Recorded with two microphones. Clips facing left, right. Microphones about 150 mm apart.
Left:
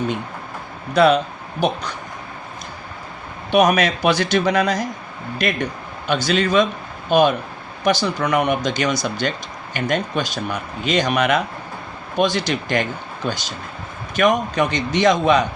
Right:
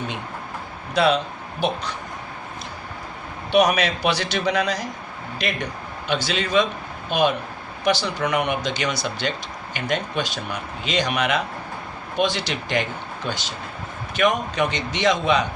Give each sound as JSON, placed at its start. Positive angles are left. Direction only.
{"t": 0.9, "sound": "speech", "side_deg": 45}
{"t": 3.5, "sound": "speech", "side_deg": 50}
{"t": 14.2, "sound": "speech", "side_deg": 45}